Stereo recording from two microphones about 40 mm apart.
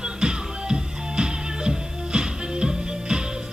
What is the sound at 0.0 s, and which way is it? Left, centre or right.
Music, centre.